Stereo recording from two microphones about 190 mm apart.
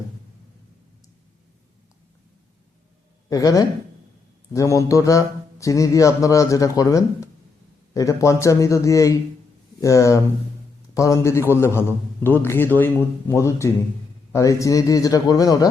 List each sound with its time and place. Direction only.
3.2 s a man's voice: 20° left (ahead or behind)